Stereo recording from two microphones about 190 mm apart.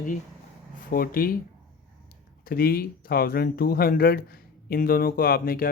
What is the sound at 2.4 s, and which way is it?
Speech, 50° left (ahead or behind).